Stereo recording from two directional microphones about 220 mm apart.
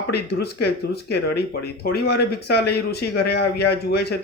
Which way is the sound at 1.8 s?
45° left (ahead or behind).